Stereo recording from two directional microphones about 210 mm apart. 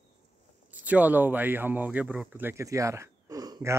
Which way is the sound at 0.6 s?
5° right (ahead or behind).